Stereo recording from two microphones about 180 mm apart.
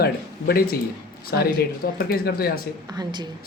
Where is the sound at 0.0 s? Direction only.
60° left (ahead or behind).